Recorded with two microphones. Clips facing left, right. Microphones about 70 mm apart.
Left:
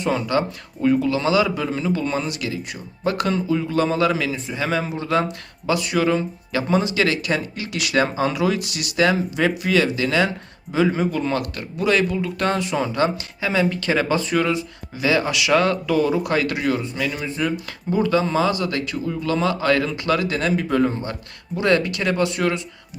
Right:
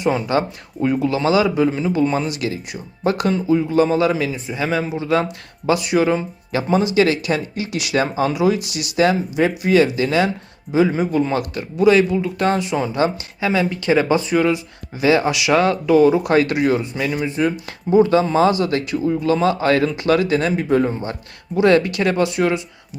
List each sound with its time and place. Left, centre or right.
0.0 s a man's voice: centre
4.8 s speech: centre
5.6 s a man's voice: centre
7.9 s speech: centre
8.8 s a man's voice: right
10.7 s speech: centre
12.9 s a man's voice: right